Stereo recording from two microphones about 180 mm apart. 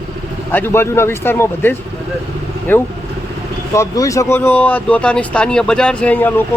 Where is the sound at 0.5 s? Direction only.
10° left (ahead or behind).